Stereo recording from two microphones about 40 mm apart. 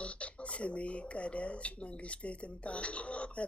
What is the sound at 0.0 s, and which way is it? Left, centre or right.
Speech, left.